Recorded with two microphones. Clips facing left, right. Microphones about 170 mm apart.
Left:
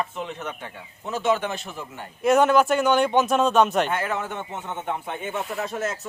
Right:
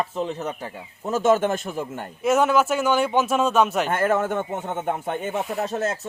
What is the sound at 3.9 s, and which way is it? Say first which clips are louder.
Speech: right 6 dB; 50° right (ahead or behind).